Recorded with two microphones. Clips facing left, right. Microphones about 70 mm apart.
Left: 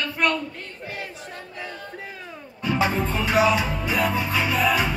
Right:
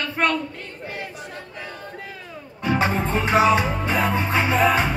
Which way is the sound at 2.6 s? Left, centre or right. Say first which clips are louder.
Right 1 dB; right.